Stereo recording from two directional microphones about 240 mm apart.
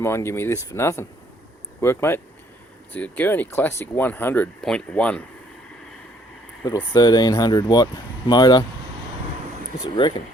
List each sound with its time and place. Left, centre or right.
0.0 s speech: centre
6.6 s speech: centre
10.0 s speech: centre